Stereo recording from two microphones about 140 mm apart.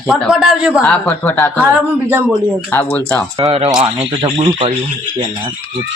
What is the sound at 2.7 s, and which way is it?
Speech, 10° left (ahead or behind).